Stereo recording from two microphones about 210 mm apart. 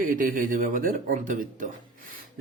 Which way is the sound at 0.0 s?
40° right (ahead or behind).